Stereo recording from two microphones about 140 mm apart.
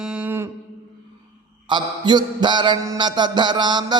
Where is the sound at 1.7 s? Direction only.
35° right (ahead or behind).